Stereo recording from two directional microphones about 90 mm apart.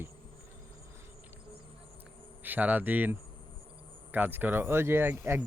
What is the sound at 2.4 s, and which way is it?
Speech, 20° right (ahead or behind).